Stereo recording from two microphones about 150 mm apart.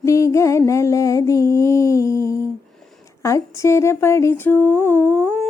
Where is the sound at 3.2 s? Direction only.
20° left (ahead or behind).